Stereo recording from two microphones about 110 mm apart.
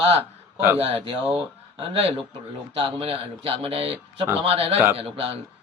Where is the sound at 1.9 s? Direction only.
65° right (ahead or behind).